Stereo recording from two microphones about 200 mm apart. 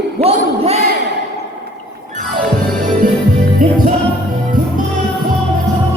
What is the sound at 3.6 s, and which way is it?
Music, 45° right (ahead or behind).